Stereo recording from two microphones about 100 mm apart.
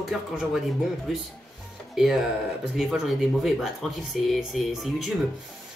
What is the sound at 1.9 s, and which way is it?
Speech, 5° right (ahead or behind).